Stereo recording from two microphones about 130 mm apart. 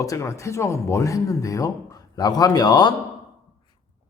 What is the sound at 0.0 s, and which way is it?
Speech, 25° left (ahead or behind).